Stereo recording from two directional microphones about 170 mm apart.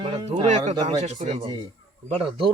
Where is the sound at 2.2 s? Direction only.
30° right (ahead or behind).